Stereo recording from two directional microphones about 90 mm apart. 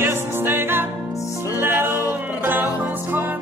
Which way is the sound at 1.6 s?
25° right (ahead or behind).